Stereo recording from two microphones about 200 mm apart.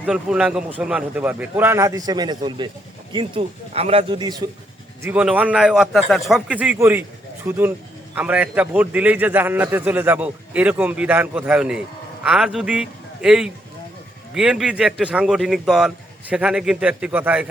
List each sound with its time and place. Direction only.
0.0 s a man's voice: 5° right (ahead or behind); by 4.4 s 20° right (ahead or behind)
5.0 s a man's voice: 5° right (ahead or behind)